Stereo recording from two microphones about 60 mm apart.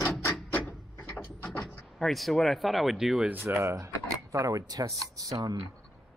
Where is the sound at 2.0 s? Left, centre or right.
Centre.